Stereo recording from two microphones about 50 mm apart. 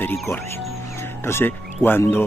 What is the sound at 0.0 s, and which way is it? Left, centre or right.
Speech, left.